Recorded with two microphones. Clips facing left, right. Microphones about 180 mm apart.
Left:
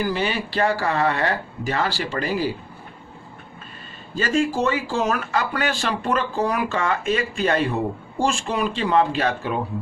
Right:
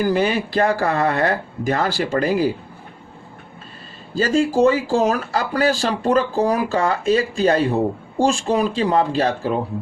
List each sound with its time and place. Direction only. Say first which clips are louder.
0.0 s speech: right 5 dB; 45° right (ahead or behind)
4.1 s speech: right 4 dB; 35° right (ahead or behind)